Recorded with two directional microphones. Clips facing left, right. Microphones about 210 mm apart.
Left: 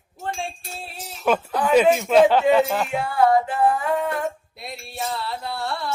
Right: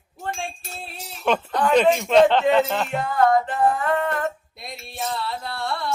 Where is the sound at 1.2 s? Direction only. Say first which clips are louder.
Even; 5° left (ahead or behind).